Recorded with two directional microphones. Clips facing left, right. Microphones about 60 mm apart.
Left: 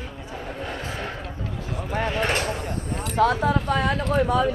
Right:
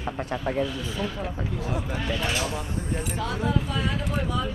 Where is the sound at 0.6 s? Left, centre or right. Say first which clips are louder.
Even; left.